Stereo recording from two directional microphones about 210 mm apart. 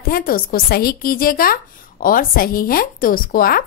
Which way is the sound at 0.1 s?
45° left (ahead or behind).